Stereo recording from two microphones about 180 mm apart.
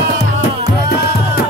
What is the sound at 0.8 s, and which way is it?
Music, 55° left (ahead or behind).